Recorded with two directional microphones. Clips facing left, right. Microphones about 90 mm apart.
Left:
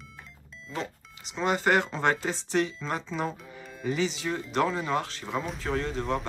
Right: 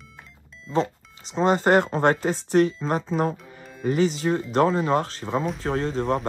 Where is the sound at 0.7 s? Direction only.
35° right (ahead or behind).